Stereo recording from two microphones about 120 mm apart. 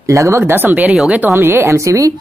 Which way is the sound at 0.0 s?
25° right (ahead or behind).